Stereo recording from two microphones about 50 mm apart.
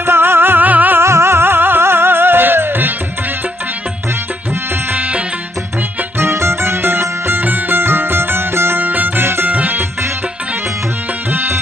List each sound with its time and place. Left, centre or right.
0.0 s music: right
1.0 s music: right
4.9 s music: right
6.1 s music: right
8.8 s music: right
9.5 s music: right